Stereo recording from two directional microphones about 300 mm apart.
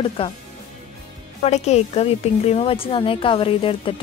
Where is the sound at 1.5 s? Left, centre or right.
Left.